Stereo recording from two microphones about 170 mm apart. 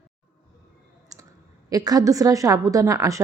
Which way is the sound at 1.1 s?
20° right (ahead or behind).